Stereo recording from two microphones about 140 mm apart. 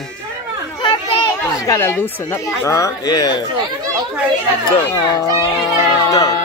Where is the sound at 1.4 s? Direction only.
20° left (ahead or behind).